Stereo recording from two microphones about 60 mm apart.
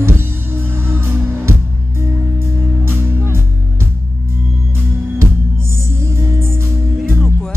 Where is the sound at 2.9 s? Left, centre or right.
Right.